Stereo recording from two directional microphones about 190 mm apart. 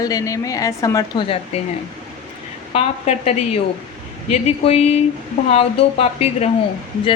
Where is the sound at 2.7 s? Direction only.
35° left (ahead or behind).